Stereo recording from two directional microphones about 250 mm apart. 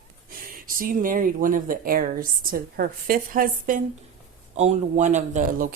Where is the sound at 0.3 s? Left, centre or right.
Right.